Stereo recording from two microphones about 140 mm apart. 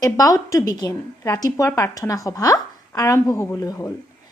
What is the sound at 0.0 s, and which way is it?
A woman's voice, 25° left (ahead or behind).